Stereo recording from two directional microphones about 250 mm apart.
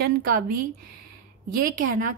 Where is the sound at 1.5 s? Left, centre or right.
Right.